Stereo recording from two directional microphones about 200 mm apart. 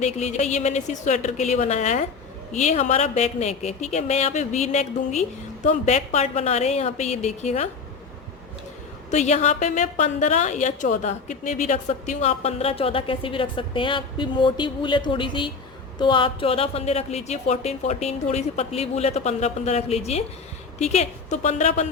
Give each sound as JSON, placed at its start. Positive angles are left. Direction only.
{"t": 0.0, "sound": "a woman's voice", "side_deg": 35}
{"t": 9.0, "sound": "a woman's voice", "side_deg": 35}